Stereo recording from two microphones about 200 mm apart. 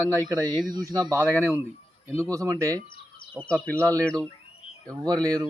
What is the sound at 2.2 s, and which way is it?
Speech, 15° right (ahead or behind).